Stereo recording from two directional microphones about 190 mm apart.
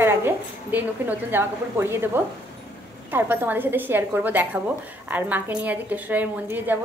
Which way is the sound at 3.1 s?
10° right (ahead or behind).